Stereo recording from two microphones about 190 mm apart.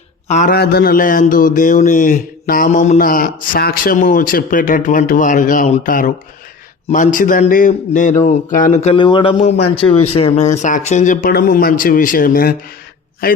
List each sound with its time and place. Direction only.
0.3 s speech: 40° left (ahead or behind)
0.5 s speech: 55° left (ahead or behind)